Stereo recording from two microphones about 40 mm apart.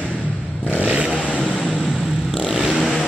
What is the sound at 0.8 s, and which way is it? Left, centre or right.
Vehicle, right.